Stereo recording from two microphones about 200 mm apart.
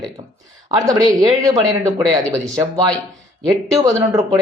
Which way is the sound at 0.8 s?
20° right (ahead or behind).